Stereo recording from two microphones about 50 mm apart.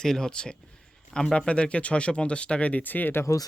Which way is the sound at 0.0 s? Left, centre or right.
Centre.